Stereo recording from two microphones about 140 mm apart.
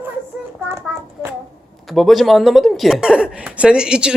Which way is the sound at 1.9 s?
Centre (ahead or behind).